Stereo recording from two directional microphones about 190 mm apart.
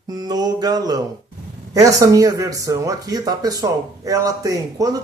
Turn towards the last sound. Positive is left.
turn(degrees=-20)  # may be behind; listen again after turning